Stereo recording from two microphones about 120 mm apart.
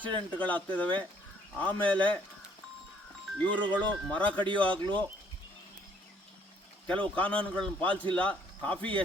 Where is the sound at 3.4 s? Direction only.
10° left (ahead or behind).